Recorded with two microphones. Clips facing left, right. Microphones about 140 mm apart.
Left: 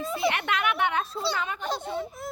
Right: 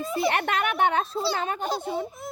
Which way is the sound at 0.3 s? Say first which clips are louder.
Right 1 dB; 45° right (ahead or behind).